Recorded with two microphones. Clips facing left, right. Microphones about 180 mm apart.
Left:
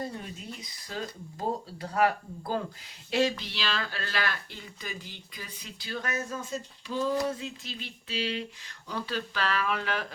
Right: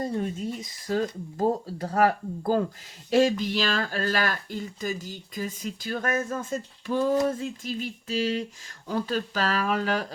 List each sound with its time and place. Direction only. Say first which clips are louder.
0.0 s speech: right 8 dB; 45° right (ahead or behind)